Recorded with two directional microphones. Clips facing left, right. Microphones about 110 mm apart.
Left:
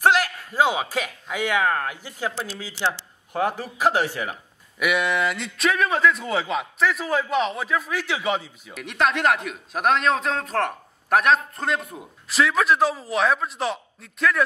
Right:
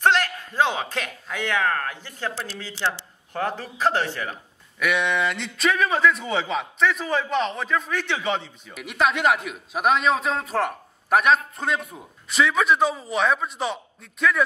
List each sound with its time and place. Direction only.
0.0 s a man's voice: 10° left (ahead or behind)